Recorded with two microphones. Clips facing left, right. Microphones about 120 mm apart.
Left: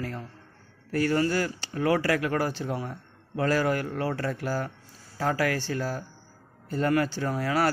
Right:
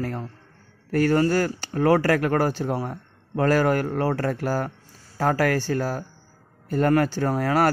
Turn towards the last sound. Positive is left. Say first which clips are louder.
# right 5 dB
turn(degrees=-50)  # may be behind; listen again after turning